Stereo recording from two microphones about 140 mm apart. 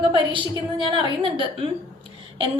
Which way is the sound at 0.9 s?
35° right (ahead or behind).